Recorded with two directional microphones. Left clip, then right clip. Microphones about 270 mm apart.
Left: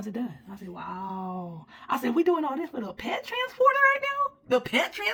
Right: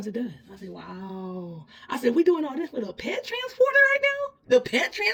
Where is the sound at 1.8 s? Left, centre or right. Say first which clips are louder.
Right 3 dB; centre.